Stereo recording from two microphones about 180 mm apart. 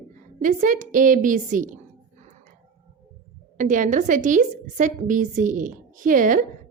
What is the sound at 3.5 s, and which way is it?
A woman's voice, 45° right (ahead or behind).